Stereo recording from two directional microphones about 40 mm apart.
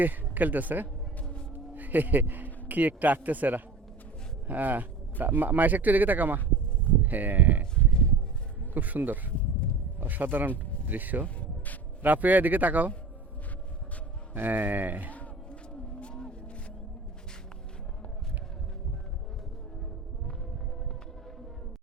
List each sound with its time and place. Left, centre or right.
0.0 s speech: right
8.7 s speech: right
9.3 s a sound: left
10.0 s speech: right
11.3 s a sound: left
12.0 s speech: right
14.3 s speech: right
15.4 s vehicle: left